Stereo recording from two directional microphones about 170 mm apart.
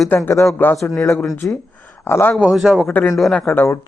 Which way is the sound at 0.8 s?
15° left (ahead or behind).